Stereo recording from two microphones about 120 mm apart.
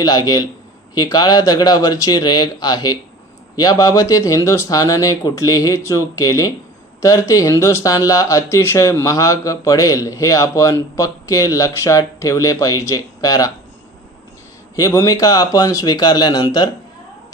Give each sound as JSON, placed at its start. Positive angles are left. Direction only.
{"t": 0.0, "sound": "a man's voice", "side_deg": 35}
{"t": 14.8, "sound": "speech", "side_deg": 30}